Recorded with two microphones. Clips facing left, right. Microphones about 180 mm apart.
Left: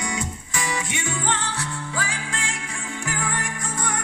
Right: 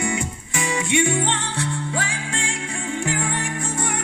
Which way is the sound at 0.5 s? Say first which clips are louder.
Right 7 dB; 25° right (ahead or behind).